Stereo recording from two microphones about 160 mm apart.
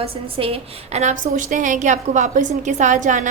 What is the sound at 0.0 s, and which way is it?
A woman's voice, 35° right (ahead or behind).